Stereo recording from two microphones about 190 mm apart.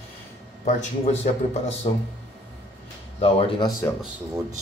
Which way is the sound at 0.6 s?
35° left (ahead or behind).